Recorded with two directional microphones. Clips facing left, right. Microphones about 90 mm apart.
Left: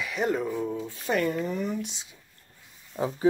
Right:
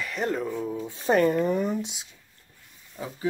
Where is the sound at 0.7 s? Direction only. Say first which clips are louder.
Right 1 dB; 20° right (ahead or behind).